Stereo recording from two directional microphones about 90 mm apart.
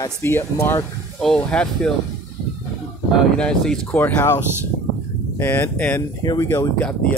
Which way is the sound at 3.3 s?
10° left (ahead or behind).